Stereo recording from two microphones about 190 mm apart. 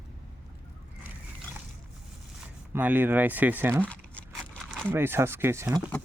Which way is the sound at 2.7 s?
10° right (ahead or behind).